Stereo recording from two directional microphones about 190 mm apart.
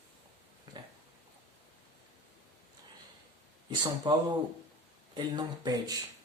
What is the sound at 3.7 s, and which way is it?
Speech, 20° right (ahead or behind).